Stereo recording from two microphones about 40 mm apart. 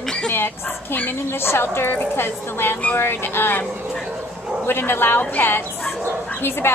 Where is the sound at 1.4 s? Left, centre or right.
Left.